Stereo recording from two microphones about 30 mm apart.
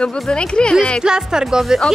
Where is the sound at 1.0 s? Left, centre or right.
Right.